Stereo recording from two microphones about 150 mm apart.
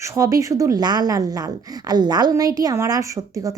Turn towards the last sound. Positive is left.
turn(degrees=-20)  # may be behind; listen again after turning